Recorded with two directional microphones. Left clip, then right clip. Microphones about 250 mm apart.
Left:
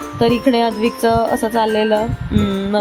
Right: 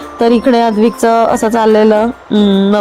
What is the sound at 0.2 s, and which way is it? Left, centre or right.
Speech, right.